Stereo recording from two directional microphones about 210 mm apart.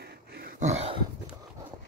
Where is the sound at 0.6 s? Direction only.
30° right (ahead or behind).